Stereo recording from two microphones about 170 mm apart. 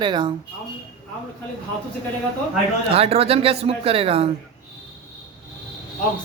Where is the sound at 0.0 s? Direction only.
25° right (ahead or behind).